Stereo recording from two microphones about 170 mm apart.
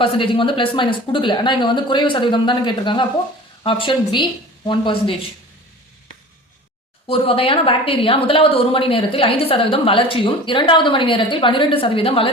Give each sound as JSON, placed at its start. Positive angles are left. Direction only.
{"t": 0.0, "sound": "speech", "side_deg": 30}
{"t": 7.1, "sound": "a woman's voice", "side_deg": 35}